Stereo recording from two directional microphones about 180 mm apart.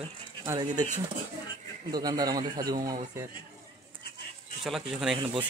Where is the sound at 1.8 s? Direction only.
20° right (ahead or behind).